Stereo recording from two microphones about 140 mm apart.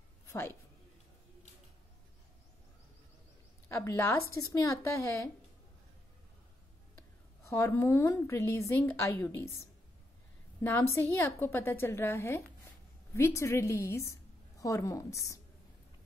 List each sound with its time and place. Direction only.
0.3 s speech: 15° left (ahead or behind)
3.6 s a woman's voice: 20° left (ahead or behind)
7.4 s a woman's voice: 20° left (ahead or behind)
10.6 s a woman's voice: 15° left (ahead or behind)